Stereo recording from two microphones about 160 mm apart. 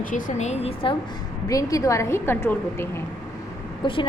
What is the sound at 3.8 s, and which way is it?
Speech, 30° left (ahead or behind).